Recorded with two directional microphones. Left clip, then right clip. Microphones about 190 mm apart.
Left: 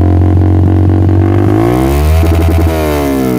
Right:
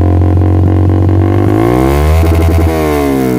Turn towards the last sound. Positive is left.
turn(degrees=10)  # may be behind; listen again after turning